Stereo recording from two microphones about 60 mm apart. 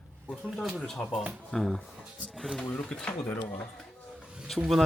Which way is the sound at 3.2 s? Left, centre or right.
Left.